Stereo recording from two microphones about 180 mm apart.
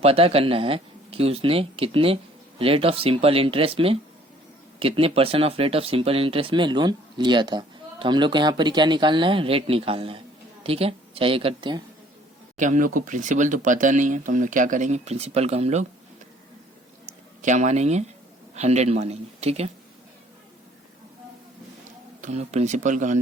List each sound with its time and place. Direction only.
0.0 s speech: 35° right (ahead or behind)
12.5 s speech: 45° right (ahead or behind)
17.4 s speech: 40° right (ahead or behind)
22.2 s speech: 40° right (ahead or behind)